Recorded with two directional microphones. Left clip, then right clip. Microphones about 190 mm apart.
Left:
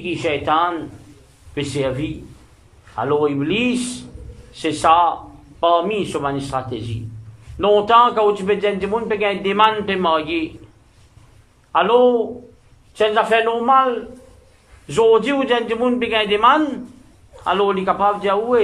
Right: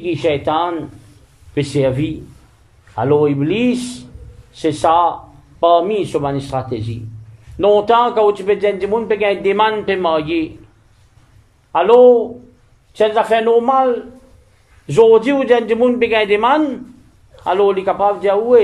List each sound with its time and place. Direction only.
0.0 s a man's voice: 25° right (ahead or behind)
11.7 s a man's voice: 25° right (ahead or behind)